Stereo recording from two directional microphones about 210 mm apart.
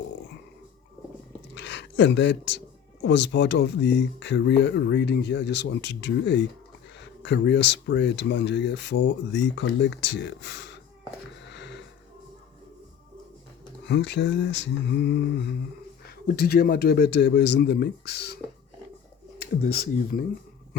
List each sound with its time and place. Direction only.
1.5 s a sound: 55° left (ahead or behind)
3.0 s speech: 60° left (ahead or behind)
11.4 s sniff: 55° left (ahead or behind)
13.8 s a man's voice: 55° left (ahead or behind)
19.4 s a man's voice: 45° left (ahead or behind)